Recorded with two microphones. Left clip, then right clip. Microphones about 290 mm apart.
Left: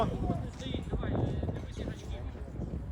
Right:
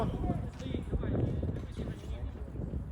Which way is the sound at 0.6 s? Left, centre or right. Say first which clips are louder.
Left 1 dB; centre.